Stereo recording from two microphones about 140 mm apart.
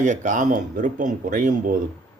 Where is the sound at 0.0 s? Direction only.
65° right (ahead or behind).